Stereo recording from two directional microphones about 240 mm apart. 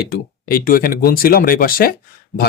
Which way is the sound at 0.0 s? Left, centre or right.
Left.